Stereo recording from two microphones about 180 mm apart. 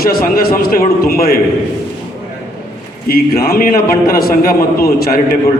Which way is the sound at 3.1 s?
55° left (ahead or behind).